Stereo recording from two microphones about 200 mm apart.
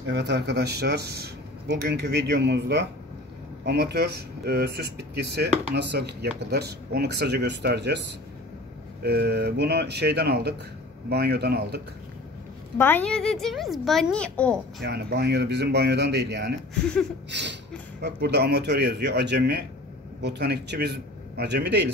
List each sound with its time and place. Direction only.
0.1 s speech: 55° right (ahead or behind)
9.0 s speech: 55° right (ahead or behind)
12.7 s a child's voice: 10° left (ahead or behind)
14.8 s speech: 55° right (ahead or behind)
16.8 s a child's voice: 5° left (ahead or behind)
17.3 s speech: 60° right (ahead or behind)